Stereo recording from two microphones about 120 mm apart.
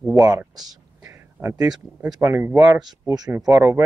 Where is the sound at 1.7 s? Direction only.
5° right (ahead or behind).